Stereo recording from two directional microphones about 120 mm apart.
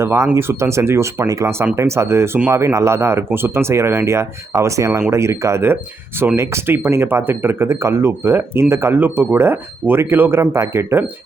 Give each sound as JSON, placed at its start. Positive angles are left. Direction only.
{"t": 0.0, "sound": "speech", "side_deg": -20}